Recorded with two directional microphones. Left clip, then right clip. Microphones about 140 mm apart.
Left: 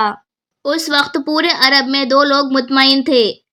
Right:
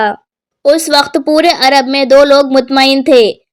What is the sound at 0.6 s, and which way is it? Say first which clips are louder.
A woman's voice: right 7 dB; 20° right (ahead or behind).